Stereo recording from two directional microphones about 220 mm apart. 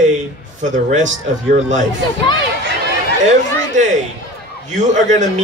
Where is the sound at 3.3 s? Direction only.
35° right (ahead or behind).